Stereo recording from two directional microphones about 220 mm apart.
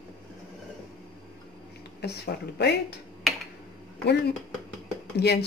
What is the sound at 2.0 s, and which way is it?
Speech, 50° left (ahead or behind).